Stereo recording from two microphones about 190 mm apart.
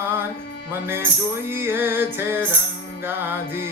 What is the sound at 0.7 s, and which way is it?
Music, 10° right (ahead or behind).